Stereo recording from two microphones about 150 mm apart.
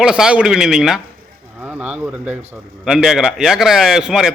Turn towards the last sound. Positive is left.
turn(degrees=-5)  # may be behind; listen again after turning